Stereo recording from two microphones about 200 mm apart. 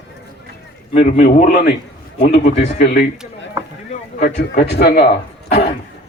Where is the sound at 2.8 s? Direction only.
50° left (ahead or behind).